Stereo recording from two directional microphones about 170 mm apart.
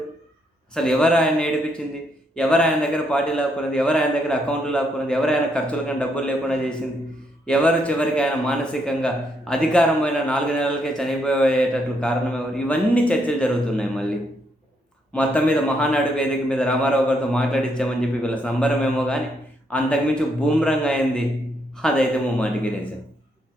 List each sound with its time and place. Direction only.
0.7 s a man's voice: 5° left (ahead or behind)
15.1 s a man's voice: 10° left (ahead or behind)